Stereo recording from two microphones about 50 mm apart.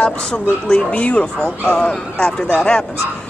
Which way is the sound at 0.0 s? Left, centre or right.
Centre.